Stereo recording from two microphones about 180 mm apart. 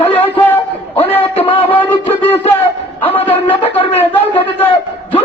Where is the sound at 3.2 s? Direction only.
30° left (ahead or behind).